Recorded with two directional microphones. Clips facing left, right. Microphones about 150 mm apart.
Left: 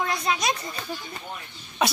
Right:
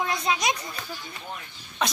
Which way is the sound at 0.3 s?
20° right (ahead or behind).